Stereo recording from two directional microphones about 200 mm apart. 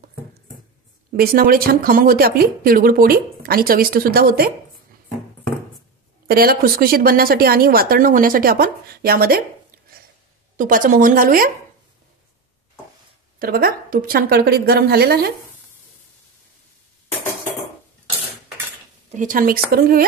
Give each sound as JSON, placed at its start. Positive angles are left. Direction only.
{"t": 1.1, "sound": "speech", "side_deg": -45}
{"t": 6.2, "sound": "speech", "side_deg": -50}
{"t": 10.6, "sound": "speech", "side_deg": -40}
{"t": 13.4, "sound": "speech", "side_deg": -50}
{"t": 19.0, "sound": "speech", "side_deg": -40}